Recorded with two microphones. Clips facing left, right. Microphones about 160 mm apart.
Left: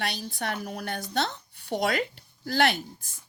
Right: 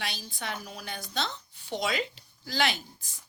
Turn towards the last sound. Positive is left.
turn(degrees=55)  # may be behind; listen again after turning